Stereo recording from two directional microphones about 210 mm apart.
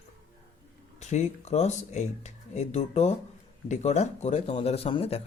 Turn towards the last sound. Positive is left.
turn(degrees=25)  # may be behind; listen again after turning